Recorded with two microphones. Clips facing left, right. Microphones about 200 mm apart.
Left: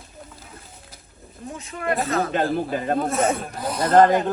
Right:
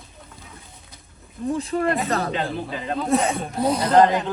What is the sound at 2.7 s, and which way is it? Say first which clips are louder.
Speech: left 4 dB; 50° left (ahead or behind).